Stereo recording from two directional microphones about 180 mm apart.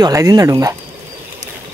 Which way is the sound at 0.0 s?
20° right (ahead or behind).